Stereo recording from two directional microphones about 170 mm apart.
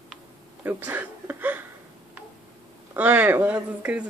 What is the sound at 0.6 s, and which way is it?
Speech, 10° right (ahead or behind).